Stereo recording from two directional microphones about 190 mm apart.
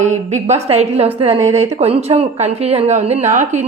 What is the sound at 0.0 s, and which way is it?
Speech, 35° right (ahead or behind).